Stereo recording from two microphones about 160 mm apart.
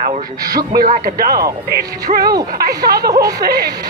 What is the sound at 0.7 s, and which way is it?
Speech, 60° right (ahead or behind).